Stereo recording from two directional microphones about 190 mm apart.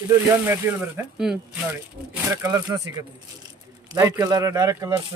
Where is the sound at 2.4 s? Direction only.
20° right (ahead or behind).